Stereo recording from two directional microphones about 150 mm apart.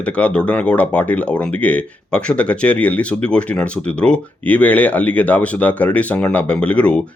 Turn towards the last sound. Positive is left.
turn(degrees=10)  # may be behind; listen again after turning